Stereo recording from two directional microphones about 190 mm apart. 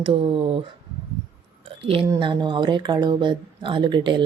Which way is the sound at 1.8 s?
25° right (ahead or behind).